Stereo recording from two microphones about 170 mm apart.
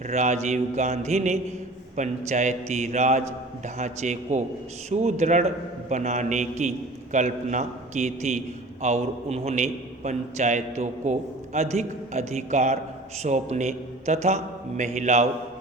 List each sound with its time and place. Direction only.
0.1 s a man's voice: 45° right (ahead or behind)